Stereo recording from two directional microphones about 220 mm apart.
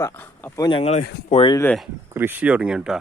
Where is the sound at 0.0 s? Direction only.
10° left (ahead or behind); by 1.5 s 25° left (ahead or behind).